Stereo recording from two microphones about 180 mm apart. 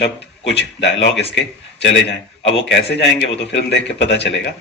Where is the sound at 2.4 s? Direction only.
80° left.